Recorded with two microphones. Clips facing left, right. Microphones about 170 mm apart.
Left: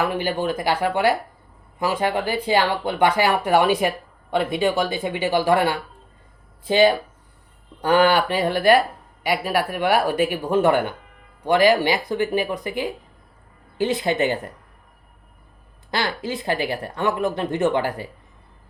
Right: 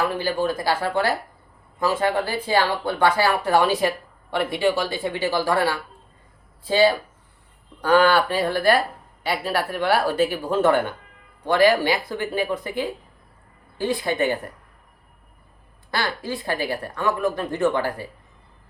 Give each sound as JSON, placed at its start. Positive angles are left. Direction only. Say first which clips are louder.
{"t": 0.0, "sound": "speech", "louder": "even", "side_deg": 20}
{"t": 15.9, "sound": "speech", "louder": "left 1 dB", "side_deg": 20}